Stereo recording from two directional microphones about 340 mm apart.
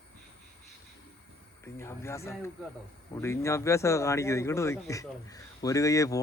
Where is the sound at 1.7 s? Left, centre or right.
Centre.